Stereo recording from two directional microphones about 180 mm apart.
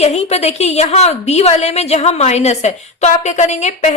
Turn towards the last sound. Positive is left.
turn(degrees=40)  # may be behind; listen again after turning